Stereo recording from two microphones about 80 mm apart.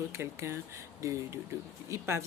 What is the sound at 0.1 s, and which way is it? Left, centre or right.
Speech, right.